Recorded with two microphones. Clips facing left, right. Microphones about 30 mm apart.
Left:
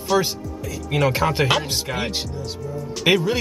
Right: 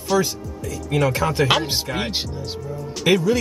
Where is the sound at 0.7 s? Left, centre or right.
Centre.